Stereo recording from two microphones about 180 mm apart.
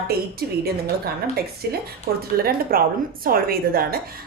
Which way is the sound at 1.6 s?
65° right (ahead or behind).